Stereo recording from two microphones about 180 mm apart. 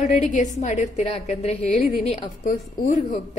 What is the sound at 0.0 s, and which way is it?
A woman's voice, 45° left (ahead or behind).